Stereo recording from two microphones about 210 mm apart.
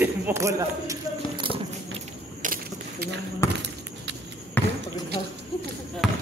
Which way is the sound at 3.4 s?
15° left (ahead or behind).